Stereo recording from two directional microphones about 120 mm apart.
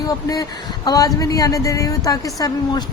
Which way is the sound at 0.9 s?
30° left (ahead or behind).